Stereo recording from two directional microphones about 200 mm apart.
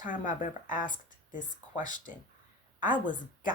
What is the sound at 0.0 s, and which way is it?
Speech, 40° left (ahead or behind).